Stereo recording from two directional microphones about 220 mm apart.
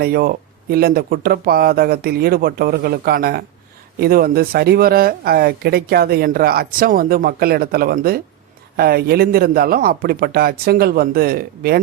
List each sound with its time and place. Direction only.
0.0 s speech: 45° right (ahead or behind)